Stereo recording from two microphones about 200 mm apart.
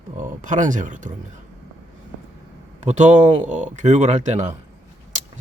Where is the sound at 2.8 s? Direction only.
35° right (ahead or behind).